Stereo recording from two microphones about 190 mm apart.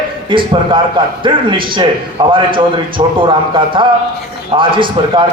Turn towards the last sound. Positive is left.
turn(degrees=-25)  # may be behind; listen again after turning